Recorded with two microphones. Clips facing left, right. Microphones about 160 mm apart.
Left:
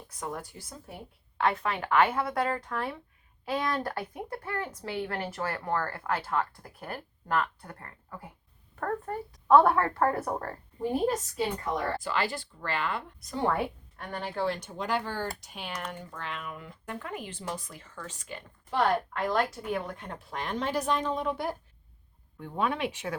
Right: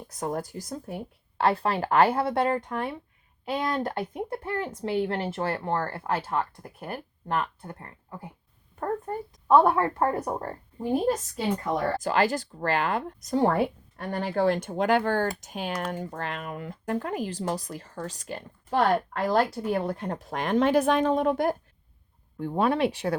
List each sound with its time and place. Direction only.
0.1 s speech: 40° right (ahead or behind); by 8.3 s 25° right (ahead or behind)
9.5 s a woman's voice: 15° right (ahead or behind)
11.7 s speech: 45° right (ahead or behind)
16.8 s speech: 40° right (ahead or behind)
22.4 s speech: 35° right (ahead or behind)